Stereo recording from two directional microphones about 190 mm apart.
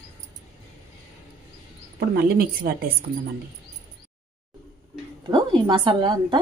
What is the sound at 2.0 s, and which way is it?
Speech, 55° right (ahead or behind).